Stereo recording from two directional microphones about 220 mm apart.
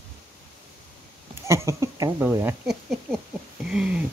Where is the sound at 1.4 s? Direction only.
10° right (ahead or behind).